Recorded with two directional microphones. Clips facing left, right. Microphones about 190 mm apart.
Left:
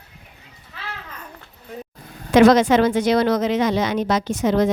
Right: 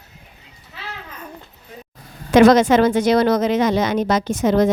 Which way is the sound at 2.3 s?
45° right (ahead or behind).